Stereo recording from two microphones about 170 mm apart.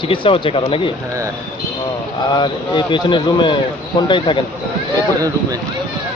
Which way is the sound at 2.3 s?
30° left (ahead or behind).